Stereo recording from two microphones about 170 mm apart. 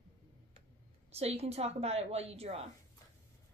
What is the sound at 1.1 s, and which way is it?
A woman's voice, 35° right (ahead or behind).